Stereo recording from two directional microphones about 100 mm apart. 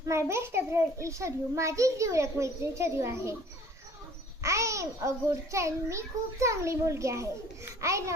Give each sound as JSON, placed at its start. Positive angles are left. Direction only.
{"t": 0.0, "sound": "a child's voice", "side_deg": -30}
{"t": 4.4, "sound": "a child's voice", "side_deg": -30}